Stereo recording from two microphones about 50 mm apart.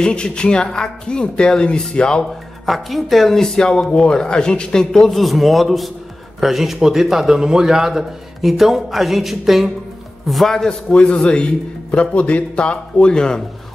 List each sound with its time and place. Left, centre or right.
0.0 s speech: centre
2.6 s speech: centre
5.2 s a man's voice: centre
10.7 s speech: centre